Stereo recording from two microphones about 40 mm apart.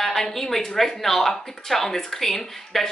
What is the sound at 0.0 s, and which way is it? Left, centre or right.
A woman's voice, centre.